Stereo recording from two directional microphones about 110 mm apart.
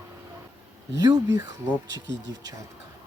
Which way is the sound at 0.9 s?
35° right (ahead or behind).